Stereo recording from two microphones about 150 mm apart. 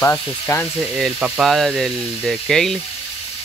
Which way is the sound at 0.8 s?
5° right (ahead or behind).